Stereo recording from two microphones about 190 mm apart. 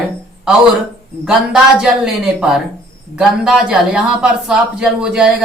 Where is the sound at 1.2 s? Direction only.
5° right (ahead or behind).